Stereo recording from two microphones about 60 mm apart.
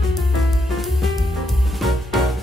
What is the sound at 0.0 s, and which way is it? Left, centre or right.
Music, centre.